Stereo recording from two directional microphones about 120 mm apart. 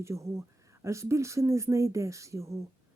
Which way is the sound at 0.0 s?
25° right (ahead or behind).